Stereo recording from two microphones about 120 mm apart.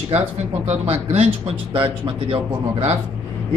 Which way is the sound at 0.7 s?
60° right (ahead or behind).